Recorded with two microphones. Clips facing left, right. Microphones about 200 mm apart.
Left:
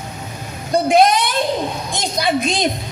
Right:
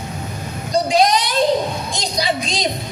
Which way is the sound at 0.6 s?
55° left (ahead or behind).